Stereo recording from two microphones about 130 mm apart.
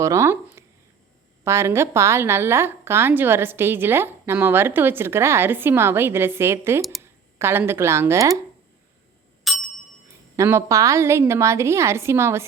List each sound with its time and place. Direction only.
0.0 s a woman's voice: 25° right (ahead or behind)
9.4 s ding: centre (ahead or behind)
10.3 s a woman's voice: 20° right (ahead or behind)